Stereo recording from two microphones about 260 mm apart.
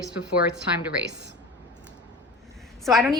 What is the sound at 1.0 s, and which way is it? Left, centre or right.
Speech, right.